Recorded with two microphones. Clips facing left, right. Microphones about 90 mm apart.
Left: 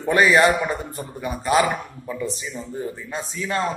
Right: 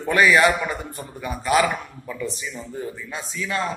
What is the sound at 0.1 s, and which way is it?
A man's voice, 25° left (ahead or behind).